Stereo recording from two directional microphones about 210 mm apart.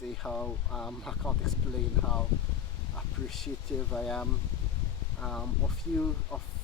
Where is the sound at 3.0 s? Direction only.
Centre (ahead or behind).